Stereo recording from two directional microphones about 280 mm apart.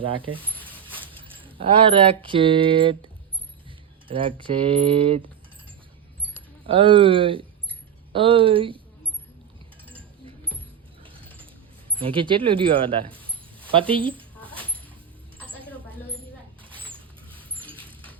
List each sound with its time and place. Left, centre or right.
0.0 s speech: centre
4.1 s speech: centre
6.7 s speech: centre
11.0 s pigeon: centre
11.9 s speech: centre
13.9 s a sound: centre
16.9 s rodents: centre